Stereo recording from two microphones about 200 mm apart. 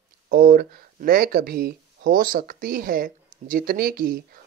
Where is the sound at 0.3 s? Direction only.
50° right (ahead or behind).